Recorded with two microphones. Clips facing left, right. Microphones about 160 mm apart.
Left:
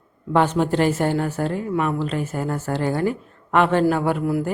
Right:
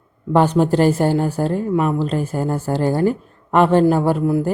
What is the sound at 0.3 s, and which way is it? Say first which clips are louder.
A woman's voice: right 4 dB; 35° right (ahead or behind).